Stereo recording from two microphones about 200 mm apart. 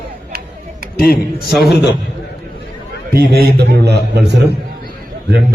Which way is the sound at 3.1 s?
50° right (ahead or behind).